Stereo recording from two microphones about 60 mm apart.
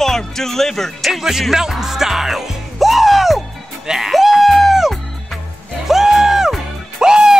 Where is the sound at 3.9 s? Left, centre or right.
Centre.